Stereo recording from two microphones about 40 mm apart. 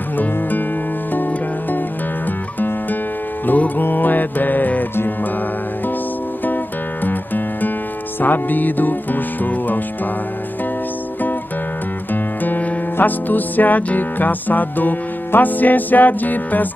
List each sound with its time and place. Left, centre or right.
0.2 s music: left
3.4 s music: left
7.1 s music: left
12.1 s music: left